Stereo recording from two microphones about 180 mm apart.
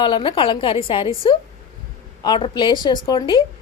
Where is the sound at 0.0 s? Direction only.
30° left (ahead or behind).